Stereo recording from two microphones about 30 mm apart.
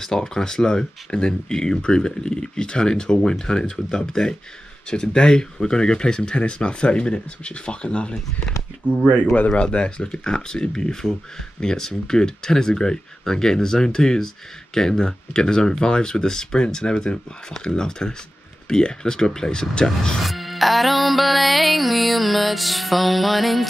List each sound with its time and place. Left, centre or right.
0.0 s speech: left
9.1 s speech: left
9.5 s speech: left
20.2 s music: centre